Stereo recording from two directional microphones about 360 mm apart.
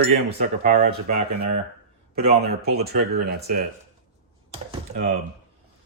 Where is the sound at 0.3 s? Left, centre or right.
Right.